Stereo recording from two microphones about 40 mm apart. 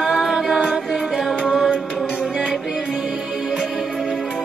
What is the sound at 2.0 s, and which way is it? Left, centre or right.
Music, centre.